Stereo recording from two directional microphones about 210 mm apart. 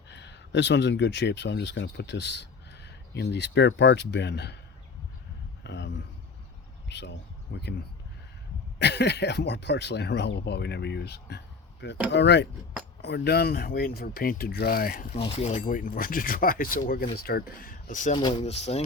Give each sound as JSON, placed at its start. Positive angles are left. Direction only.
{"t": 0.1, "sound": "speech", "side_deg": 55}
{"t": 5.6, "sound": "a sound", "side_deg": 55}
{"t": 6.8, "sound": "speech", "side_deg": 55}
{"t": 8.8, "sound": "speech", "side_deg": 55}
{"t": 15.1, "sound": "speech", "side_deg": 30}
{"t": 18.1, "sound": "speech", "side_deg": 20}